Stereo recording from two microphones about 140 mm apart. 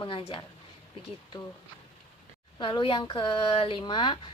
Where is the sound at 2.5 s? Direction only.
35° left (ahead or behind).